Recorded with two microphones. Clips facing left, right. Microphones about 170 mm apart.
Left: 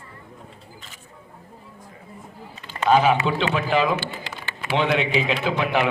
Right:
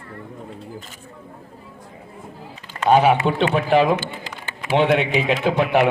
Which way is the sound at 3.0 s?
55° right (ahead or behind).